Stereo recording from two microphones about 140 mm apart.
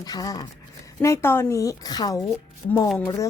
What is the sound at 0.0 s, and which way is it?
Speech, 25° left (ahead or behind).